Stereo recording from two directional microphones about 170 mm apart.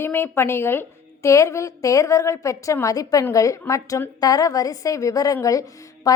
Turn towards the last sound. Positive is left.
turn(degrees=20)  # may be behind; listen again after turning